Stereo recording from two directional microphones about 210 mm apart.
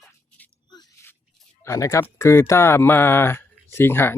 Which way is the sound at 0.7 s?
20° left (ahead or behind).